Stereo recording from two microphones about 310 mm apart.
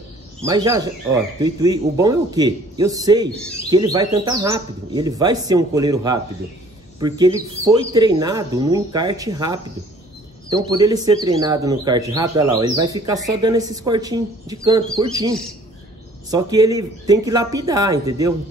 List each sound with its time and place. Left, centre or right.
0.4 s speech: centre